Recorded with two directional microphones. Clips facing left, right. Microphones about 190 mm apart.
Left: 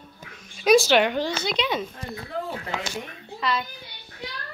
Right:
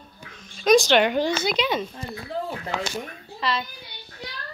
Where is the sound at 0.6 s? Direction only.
5° left (ahead or behind).